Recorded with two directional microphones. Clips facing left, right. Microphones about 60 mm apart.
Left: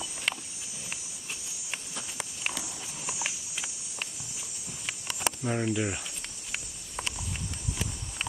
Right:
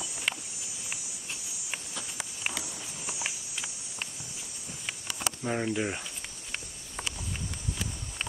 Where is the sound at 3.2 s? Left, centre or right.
Centre.